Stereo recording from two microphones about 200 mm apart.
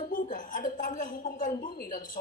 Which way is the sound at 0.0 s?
40° left (ahead or behind).